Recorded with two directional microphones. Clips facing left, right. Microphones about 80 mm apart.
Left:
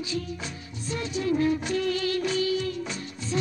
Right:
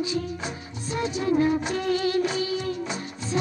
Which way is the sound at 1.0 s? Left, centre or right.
Right.